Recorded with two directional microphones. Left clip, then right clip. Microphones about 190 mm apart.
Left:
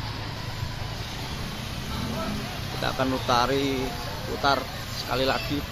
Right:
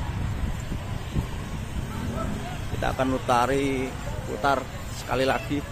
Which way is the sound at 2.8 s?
15° right (ahead or behind).